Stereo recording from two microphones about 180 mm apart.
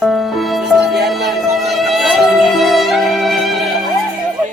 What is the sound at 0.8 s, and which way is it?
Music, 65° right (ahead or behind).